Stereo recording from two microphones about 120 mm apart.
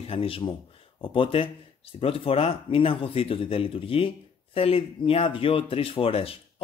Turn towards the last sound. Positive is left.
turn(degrees=55)  # may be behind; listen again after turning